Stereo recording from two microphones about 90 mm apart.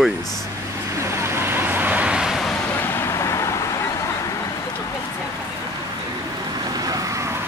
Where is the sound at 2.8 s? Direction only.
30° left (ahead or behind).